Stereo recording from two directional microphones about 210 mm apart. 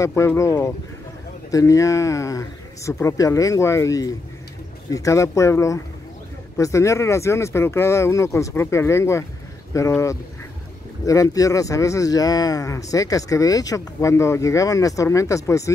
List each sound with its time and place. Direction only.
0.0 s speech: 10° left (ahead or behind)